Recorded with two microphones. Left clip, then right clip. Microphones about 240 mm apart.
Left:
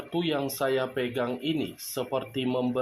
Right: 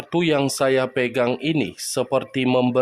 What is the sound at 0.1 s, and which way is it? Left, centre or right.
Speech, right.